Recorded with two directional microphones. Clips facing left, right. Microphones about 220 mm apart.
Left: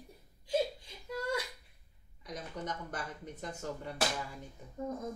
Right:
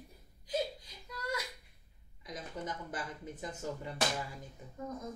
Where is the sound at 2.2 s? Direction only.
5° right (ahead or behind).